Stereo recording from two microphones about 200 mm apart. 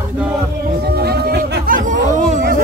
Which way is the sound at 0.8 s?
50° right (ahead or behind).